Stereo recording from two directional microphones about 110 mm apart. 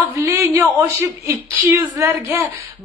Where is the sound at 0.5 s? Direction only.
25° right (ahead or behind).